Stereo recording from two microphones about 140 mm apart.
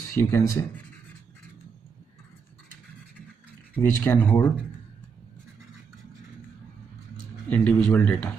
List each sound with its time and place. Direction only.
0.1 s speech: 15° left (ahead or behind)
3.7 s speech: 15° left (ahead or behind)
7.4 s speech: 10° left (ahead or behind)